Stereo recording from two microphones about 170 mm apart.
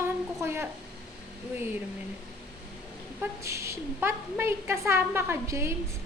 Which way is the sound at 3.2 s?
15° right (ahead or behind).